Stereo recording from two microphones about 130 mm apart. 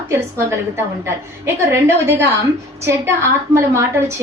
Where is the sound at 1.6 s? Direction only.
15° right (ahead or behind).